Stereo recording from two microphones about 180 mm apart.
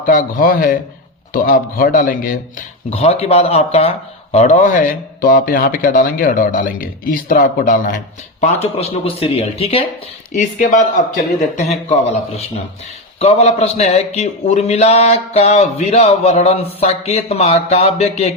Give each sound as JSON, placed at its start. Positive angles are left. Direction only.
{"t": 0.0, "sound": "speech", "side_deg": 50}
{"t": 2.9, "sound": "speech", "side_deg": 35}
{"t": 8.4, "sound": "a man's voice", "side_deg": 35}
{"t": 11.3, "sound": "a man's voice", "side_deg": 40}